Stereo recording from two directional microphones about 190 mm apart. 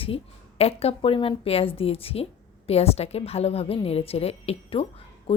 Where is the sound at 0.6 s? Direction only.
30° left (ahead or behind).